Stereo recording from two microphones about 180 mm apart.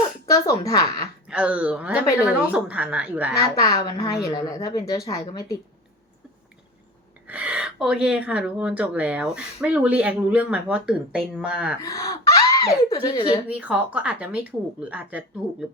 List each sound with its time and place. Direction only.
0.3 s a woman's voice: 20° left (ahead or behind)
1.3 s speech: 5° right (ahead or behind)
3.8 s a woman's voice: 20° left (ahead or behind)
5.0 s a woman's voice: 35° left (ahead or behind)
5.3 s a woman's voice: 20° left (ahead or behind)
7.3 s speech: 10° right (ahead or behind)
11.8 s speech: 15° left (ahead or behind)
13.5 s speech: 10° right (ahead or behind)